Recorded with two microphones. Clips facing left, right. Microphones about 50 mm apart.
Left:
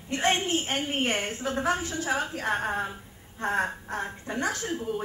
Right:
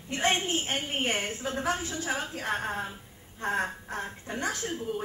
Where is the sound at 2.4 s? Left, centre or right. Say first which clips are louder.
Left 2 dB; centre.